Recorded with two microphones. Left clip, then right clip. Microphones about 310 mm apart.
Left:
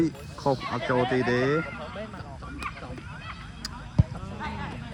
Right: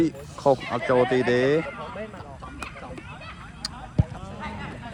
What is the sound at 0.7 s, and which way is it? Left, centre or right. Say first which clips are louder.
Speech: right 4 dB; right.